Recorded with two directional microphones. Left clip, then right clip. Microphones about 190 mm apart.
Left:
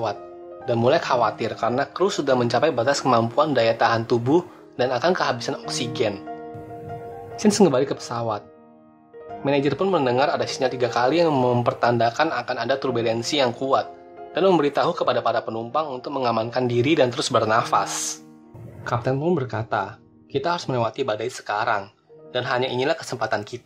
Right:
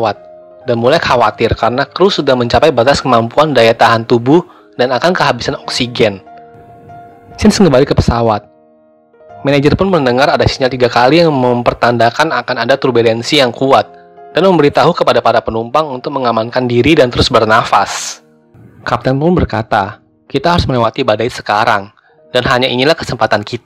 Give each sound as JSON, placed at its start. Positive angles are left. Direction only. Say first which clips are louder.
{"t": 0.8, "sound": "a man's voice", "louder": "right 10 dB", "side_deg": -25}
{"t": 7.3, "sound": "a man's voice", "louder": "right 10 dB", "side_deg": -30}